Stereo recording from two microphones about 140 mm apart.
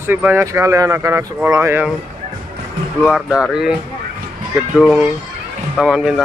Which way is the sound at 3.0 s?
5° right (ahead or behind).